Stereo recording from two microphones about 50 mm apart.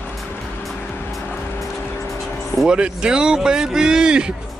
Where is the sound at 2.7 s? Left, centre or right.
Centre.